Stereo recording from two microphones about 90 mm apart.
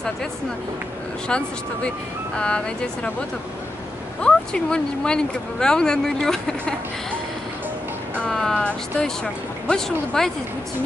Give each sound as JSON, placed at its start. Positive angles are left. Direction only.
{"t": 2.3, "sound": "speech", "side_deg": 10}
{"t": 4.2, "sound": "speech", "side_deg": 10}
{"t": 8.2, "sound": "speech", "side_deg": 5}